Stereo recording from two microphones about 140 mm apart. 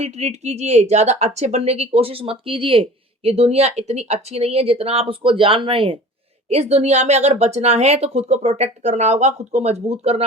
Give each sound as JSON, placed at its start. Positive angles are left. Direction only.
{"t": 0.0, "sound": "speech", "side_deg": -50}